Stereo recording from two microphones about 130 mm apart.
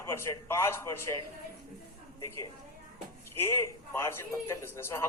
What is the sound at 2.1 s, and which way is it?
A woman's voice, 25° left (ahead or behind).